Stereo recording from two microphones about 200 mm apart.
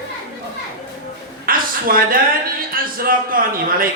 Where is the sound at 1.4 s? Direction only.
45° right (ahead or behind).